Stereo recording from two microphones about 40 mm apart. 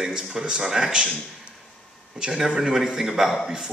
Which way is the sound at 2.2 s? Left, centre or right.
Centre.